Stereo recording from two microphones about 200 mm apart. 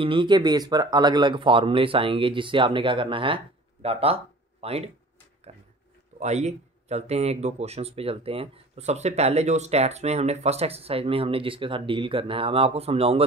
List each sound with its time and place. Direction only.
0.0 s speech: 25° right (ahead or behind)
6.1 s speech: 35° right (ahead or behind)